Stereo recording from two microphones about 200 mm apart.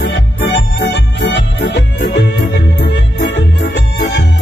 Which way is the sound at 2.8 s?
60° left (ahead or behind).